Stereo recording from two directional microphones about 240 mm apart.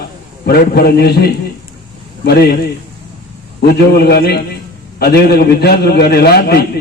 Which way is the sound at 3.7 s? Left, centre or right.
Left.